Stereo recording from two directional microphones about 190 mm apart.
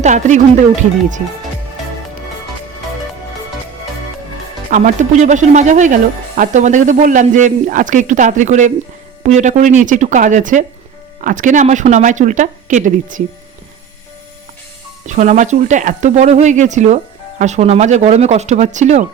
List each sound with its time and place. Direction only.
0.0 s speech: 40° right (ahead or behind)
4.7 s speech: 40° right (ahead or behind)
15.0 s speech: 40° right (ahead or behind)